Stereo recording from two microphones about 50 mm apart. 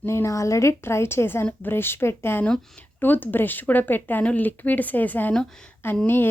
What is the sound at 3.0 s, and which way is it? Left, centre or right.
Speech, left.